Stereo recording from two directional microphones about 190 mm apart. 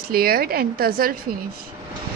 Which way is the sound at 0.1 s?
50° right (ahead or behind).